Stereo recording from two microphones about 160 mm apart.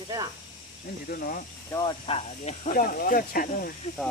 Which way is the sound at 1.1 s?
65° left (ahead or behind).